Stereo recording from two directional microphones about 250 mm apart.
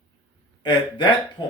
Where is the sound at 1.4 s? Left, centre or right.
Centre.